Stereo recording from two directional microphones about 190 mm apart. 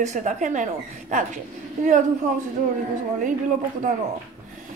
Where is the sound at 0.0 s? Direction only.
40° right (ahead or behind).